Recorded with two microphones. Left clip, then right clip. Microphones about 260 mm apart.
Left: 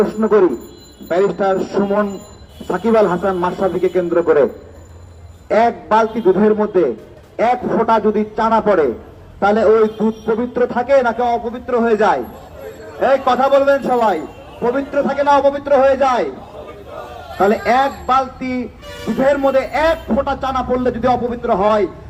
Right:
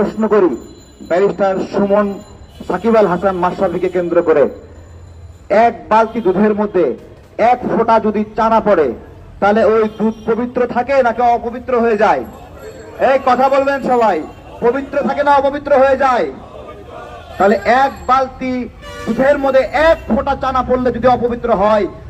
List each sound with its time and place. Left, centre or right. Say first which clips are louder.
0.0 s a man's voice: even; right
5.5 s a man's voice: right 2 dB; right
17.3 s a man's voice: right 2 dB; right